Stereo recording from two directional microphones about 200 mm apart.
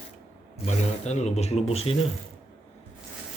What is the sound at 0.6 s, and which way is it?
Speech, 35° left (ahead or behind).